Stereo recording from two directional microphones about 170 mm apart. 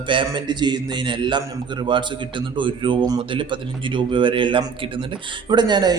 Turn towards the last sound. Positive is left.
turn(degrees=-25)  # may be behind; listen again after turning